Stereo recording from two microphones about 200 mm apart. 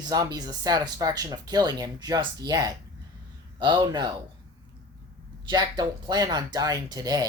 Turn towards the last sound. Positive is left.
turn(degrees=-20)  # may be behind; listen again after turning